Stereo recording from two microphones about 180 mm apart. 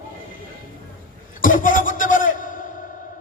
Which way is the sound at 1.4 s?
50° left (ahead or behind).